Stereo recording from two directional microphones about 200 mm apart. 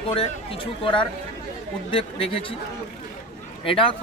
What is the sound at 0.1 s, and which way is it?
A man's voice, 25° left (ahead or behind).